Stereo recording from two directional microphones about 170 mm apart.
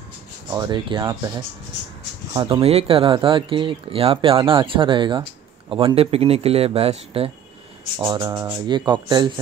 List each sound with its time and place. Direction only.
0.5 s speech: 25° right (ahead or behind)
2.3 s speech: 30° right (ahead or behind)
8.0 s speech: 25° right (ahead or behind)